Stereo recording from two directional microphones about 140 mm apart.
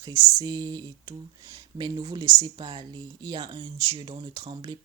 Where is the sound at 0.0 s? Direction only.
30° right (ahead or behind).